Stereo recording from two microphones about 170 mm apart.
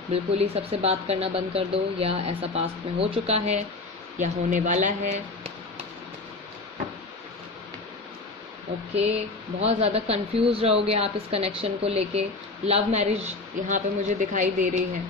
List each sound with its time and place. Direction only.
0.1 s speech: 35° right (ahead or behind)
9.6 s speech: 40° right (ahead or behind)